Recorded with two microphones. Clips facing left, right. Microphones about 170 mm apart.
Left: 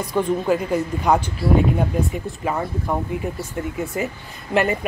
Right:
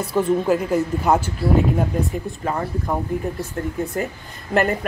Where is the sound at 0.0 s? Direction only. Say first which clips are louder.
Right 2 dB; 5° right (ahead or behind).